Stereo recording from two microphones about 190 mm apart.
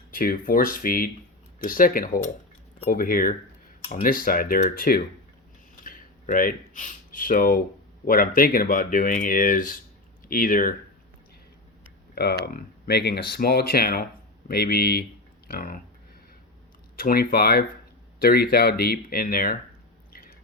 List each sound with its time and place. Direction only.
0.1 s speech: 50° left (ahead or behind)
12.1 s speech: 60° left (ahead or behind)
17.0 s speech: 50° left (ahead or behind)